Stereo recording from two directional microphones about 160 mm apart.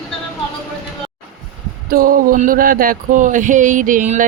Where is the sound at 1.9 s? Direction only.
60° right (ahead or behind).